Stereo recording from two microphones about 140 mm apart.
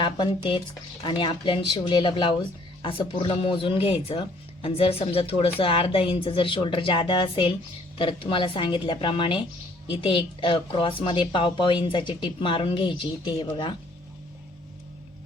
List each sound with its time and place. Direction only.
1.0 s speech: 35° left (ahead or behind)